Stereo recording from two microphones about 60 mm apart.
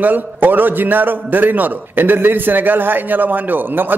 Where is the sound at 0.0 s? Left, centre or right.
Right.